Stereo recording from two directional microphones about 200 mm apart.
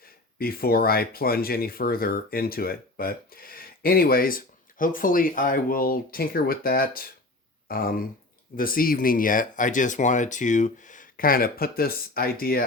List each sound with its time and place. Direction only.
0.0 s speech: 50° left (ahead or behind)